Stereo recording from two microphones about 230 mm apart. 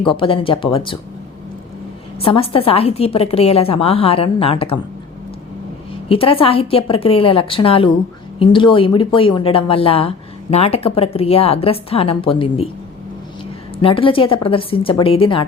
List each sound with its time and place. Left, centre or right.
0.0 s speech: left
2.2 s speech: left
6.1 s speech: left
13.8 s speech: left